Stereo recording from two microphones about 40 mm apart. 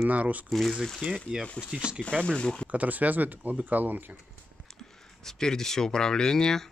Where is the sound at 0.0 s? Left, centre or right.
Right.